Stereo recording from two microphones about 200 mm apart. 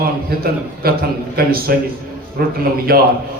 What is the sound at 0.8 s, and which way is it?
A man's voice, 50° right (ahead or behind).